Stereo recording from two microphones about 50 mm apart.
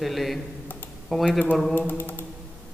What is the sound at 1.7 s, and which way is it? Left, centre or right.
Typing, left.